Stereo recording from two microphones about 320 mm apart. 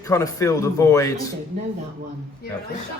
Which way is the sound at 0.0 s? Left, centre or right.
Centre.